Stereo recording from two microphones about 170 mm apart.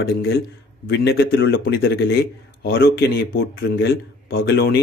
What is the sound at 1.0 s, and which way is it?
Speech, 70° left (ahead or behind).